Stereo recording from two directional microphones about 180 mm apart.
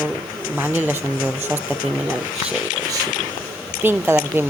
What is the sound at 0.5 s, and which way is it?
Speech, 10° right (ahead or behind).